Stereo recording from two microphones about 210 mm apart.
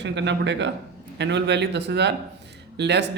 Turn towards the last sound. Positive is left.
turn(degrees=-55)  # may be behind; listen again after turning